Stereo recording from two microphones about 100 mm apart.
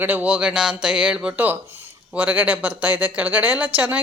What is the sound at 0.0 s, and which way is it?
Speech, 15° right (ahead or behind).